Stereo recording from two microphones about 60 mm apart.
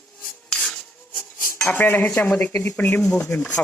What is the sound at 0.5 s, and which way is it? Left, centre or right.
Filing, centre.